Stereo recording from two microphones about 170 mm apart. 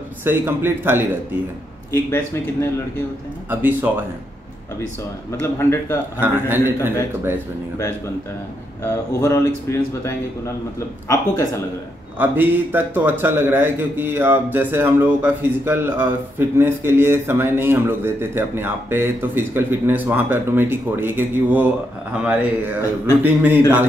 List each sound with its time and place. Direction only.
0.2 s a man's voice: 10° right (ahead or behind)
1.9 s a man's voice: 15° left (ahead or behind)
3.4 s a man's voice: 10° right (ahead or behind)
5.6 s a man's voice: 15° left (ahead or behind)
6.1 s a man's voice: 10° right (ahead or behind)
9.2 s a man's voice: 15° left (ahead or behind)
12.2 s a man's voice: 10° right (ahead or behind)